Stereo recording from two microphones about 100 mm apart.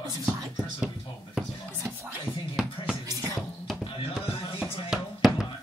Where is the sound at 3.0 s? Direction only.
35° right (ahead or behind).